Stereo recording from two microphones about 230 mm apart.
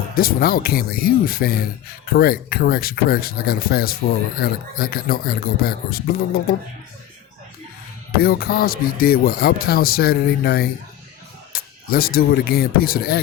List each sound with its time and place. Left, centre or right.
0.1 s speech: left
8.2 s speech: left